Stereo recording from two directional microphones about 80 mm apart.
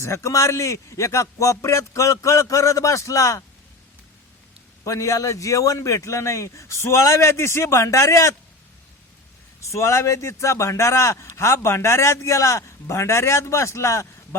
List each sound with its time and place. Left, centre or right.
0.0 s a man's voice: left
4.8 s a man's voice: left
9.7 s a man's voice: left